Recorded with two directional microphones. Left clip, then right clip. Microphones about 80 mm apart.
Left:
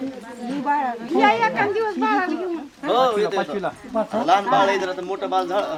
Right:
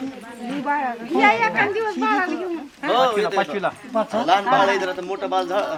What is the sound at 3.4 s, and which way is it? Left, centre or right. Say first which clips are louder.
Speech: right 2 dB; right.